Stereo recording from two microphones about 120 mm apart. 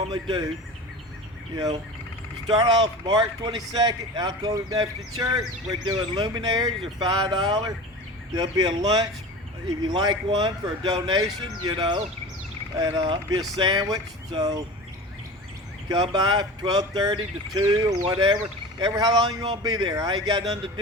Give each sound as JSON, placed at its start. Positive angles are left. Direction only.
{"t": 0.1, "sound": "speech", "side_deg": -35}
{"t": 2.5, "sound": "speech", "side_deg": -35}
{"t": 15.9, "sound": "speech", "side_deg": -35}